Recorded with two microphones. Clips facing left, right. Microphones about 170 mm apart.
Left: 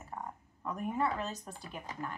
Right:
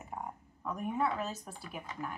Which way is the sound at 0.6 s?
Centre (ahead or behind).